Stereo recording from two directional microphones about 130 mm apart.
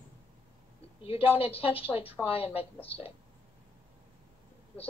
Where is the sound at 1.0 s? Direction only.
45° left (ahead or behind).